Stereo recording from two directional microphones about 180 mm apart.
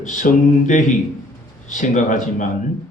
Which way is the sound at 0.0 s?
45° left (ahead or behind).